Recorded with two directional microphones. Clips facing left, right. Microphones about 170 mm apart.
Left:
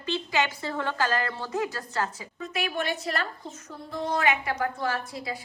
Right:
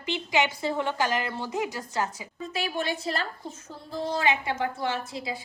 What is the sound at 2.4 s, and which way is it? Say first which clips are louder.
A woman's voice: even; 30° right (ahead or behind).